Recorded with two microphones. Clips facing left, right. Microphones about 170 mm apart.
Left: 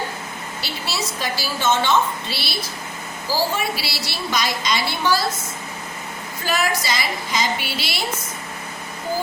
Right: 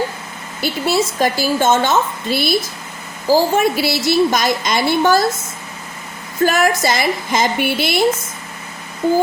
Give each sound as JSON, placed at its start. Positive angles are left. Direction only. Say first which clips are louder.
{"t": 0.6, "sound": "a woman's voice", "louder": "right 12 dB", "side_deg": -50}
{"t": 6.4, "sound": "a woman's voice", "louder": "right 8 dB", "side_deg": -50}